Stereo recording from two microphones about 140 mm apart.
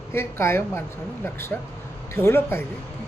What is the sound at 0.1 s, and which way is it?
A woman's voice, 20° left (ahead or behind).